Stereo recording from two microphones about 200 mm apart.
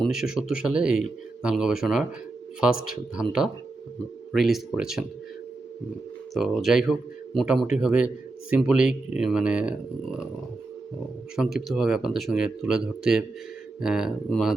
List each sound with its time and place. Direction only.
0.0 s a man's voice: centre (ahead or behind)
6.3 s a man's voice: centre (ahead or behind)
11.3 s a man's voice: centre (ahead or behind)